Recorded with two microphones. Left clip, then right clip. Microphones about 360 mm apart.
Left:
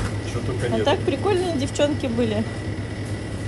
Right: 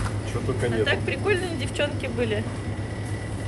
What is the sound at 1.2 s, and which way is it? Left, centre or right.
Speech, centre.